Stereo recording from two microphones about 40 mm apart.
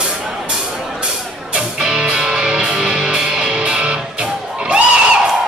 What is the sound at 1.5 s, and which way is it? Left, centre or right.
Music, centre.